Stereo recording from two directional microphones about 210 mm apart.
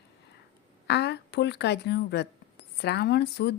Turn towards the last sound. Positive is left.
turn(degrees=50)  # may be behind; listen again after turning